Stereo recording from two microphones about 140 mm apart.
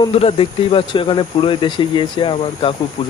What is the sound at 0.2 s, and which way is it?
Speech, 40° left (ahead or behind).